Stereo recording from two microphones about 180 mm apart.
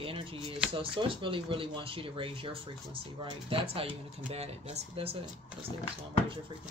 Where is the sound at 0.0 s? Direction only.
30° right (ahead or behind).